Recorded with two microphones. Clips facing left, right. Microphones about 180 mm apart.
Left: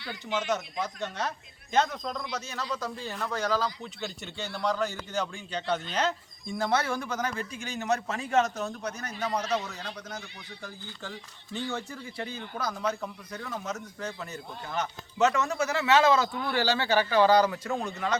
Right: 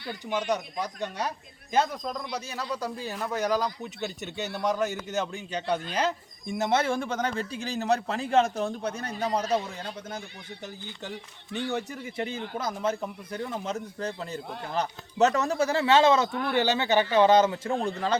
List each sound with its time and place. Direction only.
0.3 s a man's voice: 15° right (ahead or behind)
6.6 s a man's voice: 25° right (ahead or behind)